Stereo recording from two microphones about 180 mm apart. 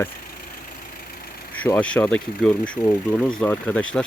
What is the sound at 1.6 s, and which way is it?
Speech, 5° left (ahead or behind).